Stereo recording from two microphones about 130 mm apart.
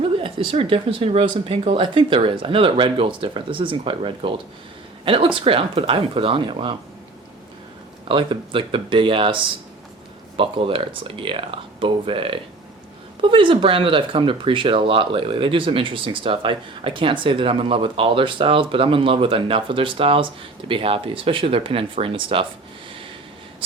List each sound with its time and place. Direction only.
0.0 s speech: 40° right (ahead or behind)
8.0 s speech: 40° right (ahead or behind)